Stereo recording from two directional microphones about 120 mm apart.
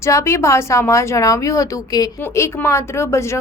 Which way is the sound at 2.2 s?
20° left (ahead or behind).